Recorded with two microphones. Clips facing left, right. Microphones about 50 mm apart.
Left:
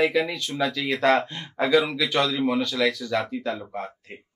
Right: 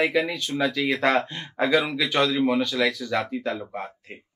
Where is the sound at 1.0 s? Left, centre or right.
Right.